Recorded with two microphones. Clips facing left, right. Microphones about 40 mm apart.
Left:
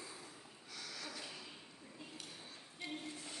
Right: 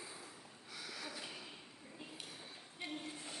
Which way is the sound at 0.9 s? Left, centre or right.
Centre.